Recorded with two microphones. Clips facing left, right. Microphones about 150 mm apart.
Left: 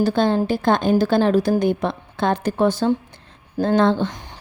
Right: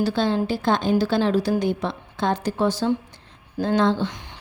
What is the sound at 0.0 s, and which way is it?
Speech, 50° left (ahead or behind).